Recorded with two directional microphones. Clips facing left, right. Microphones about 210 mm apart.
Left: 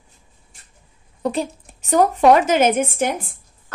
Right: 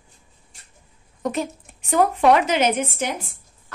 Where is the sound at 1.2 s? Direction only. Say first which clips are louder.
Left 2 dB; 30° left (ahead or behind); by 3.3 s 50° left (ahead or behind).